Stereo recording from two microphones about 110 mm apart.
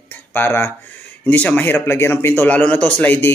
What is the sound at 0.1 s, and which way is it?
Speech, 20° left (ahead or behind).